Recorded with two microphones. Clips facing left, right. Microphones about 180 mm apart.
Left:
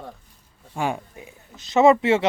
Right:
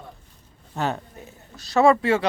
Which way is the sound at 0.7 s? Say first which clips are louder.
Left 1 dB; 10° left (ahead or behind).